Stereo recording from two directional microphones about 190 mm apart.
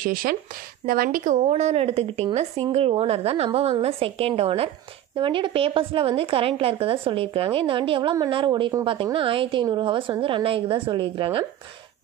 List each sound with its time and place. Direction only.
0.0 s a woman's voice: 50° right (ahead or behind); by 11.4 s 30° right (ahead or behind)